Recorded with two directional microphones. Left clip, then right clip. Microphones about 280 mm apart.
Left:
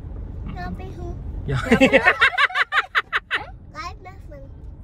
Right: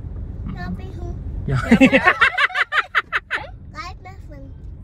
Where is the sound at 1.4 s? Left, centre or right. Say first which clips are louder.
Right 2 dB; centre.